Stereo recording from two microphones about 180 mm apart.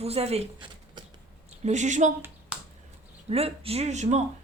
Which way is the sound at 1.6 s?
40° right (ahead or behind).